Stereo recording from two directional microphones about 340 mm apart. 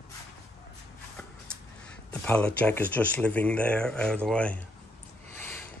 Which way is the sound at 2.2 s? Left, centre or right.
Centre.